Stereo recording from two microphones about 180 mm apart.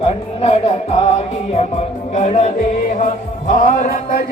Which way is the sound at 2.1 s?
40° left (ahead or behind).